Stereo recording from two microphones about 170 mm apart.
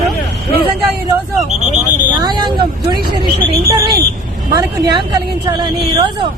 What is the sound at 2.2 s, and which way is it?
Speech, 25° right (ahead or behind).